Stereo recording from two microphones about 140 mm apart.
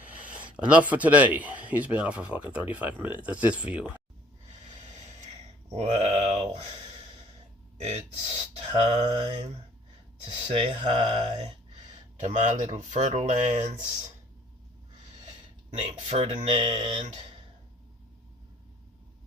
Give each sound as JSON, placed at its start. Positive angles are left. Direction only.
{"t": 0.0, "sound": "a sound", "side_deg": -10}
{"t": 0.5, "sound": "a man's voice", "side_deg": -10}
{"t": 5.7, "sound": "a sound", "side_deg": -50}
{"t": 7.8, "sound": "speech", "side_deg": -50}
{"t": 10.5, "sound": "speech", "side_deg": -40}
{"t": 12.2, "sound": "speech", "side_deg": -60}
{"t": 16.0, "sound": "speech", "side_deg": -40}